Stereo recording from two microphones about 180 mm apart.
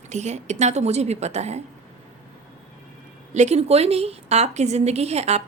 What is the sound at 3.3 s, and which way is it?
A woman's voice, 40° right (ahead or behind).